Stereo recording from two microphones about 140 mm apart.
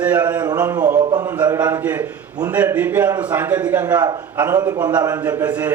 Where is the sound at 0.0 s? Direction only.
10° right (ahead or behind).